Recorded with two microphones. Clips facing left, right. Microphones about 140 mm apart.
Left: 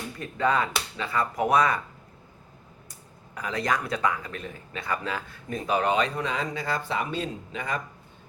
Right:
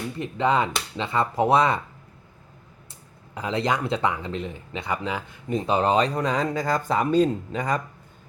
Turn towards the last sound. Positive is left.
turn(degrees=-40)  # may be behind; listen again after turning